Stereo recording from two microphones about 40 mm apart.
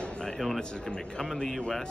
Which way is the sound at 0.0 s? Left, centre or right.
Left.